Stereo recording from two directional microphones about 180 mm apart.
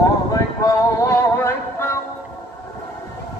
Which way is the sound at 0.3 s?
20° left (ahead or behind).